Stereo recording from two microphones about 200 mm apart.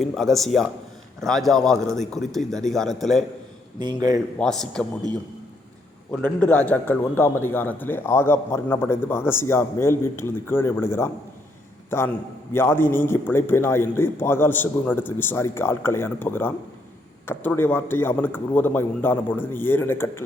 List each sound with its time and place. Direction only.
0.0 s a man's voice: centre (ahead or behind)
3.8 s a man's voice: 20° right (ahead or behind)
4.4 s a man's voice: 5° left (ahead or behind)
6.1 s a man's voice: 10° left (ahead or behind)